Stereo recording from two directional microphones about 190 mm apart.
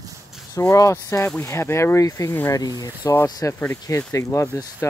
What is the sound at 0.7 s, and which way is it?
Speech, 15° left (ahead or behind).